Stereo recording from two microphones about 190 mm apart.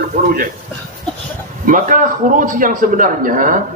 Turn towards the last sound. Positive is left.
turn(degrees=-45)  # may be behind; listen again after turning